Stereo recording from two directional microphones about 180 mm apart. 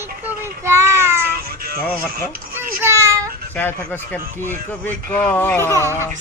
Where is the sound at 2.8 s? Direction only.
15° right (ahead or behind).